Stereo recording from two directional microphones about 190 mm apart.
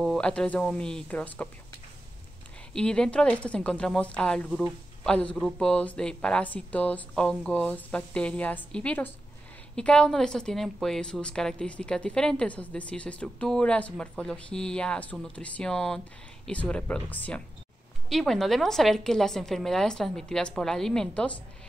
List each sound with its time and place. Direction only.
0.0 s a woman's voice: 5° left (ahead or behind)
2.7 s a woman's voice: 5° left (ahead or behind)